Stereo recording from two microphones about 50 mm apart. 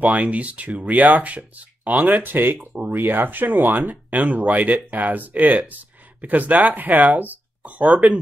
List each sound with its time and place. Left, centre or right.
0.0 s speech: right